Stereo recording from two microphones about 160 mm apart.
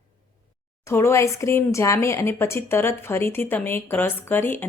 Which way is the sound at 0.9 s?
15° left (ahead or behind).